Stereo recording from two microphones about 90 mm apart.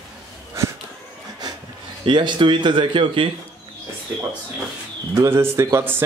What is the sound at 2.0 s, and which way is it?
Speech, 60° right (ahead or behind).